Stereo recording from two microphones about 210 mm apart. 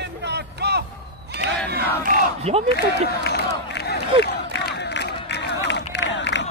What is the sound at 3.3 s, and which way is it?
Crowd, 50° left (ahead or behind).